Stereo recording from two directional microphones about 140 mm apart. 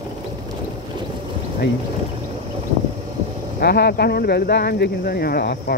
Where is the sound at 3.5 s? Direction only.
90° left.